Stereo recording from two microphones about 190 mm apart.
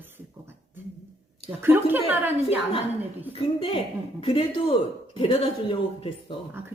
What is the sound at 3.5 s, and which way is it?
Speech, 30° left (ahead or behind).